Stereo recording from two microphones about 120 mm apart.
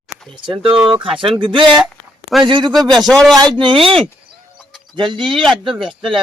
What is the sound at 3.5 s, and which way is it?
Speech, 45° right (ahead or behind).